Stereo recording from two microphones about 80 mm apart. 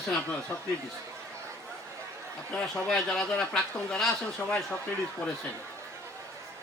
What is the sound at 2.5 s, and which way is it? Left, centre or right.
Speech, centre.